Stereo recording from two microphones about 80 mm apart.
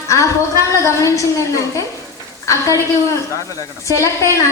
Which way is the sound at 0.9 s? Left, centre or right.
Left.